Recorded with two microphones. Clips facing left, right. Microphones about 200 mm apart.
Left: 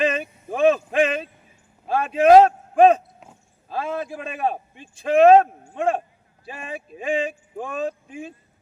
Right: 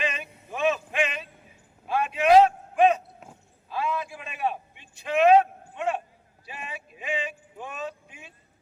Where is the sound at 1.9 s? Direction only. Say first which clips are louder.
Left 6 dB; 45° left (ahead or behind).